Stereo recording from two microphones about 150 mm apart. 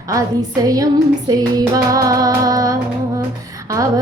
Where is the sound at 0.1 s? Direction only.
25° right (ahead or behind).